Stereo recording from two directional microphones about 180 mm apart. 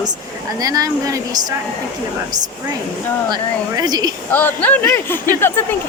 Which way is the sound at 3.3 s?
20° right (ahead or behind).